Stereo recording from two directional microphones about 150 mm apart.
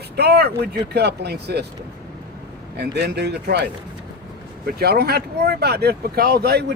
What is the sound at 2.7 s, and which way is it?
Speech, 90° right.